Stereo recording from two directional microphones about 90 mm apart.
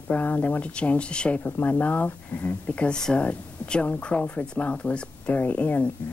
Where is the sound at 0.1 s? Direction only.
20° left (ahead or behind).